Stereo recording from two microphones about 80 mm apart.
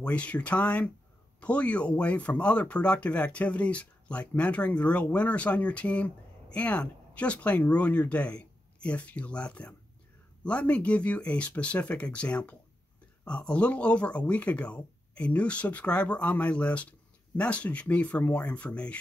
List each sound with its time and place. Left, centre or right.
0.0 s speech: centre